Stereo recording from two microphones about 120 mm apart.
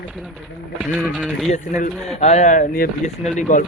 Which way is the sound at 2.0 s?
60° left (ahead or behind).